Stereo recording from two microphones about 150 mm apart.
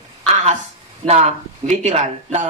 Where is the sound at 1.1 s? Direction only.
50° right (ahead or behind).